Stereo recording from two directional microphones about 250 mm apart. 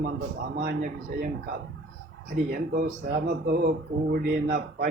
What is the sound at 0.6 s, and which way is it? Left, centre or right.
Speech, right.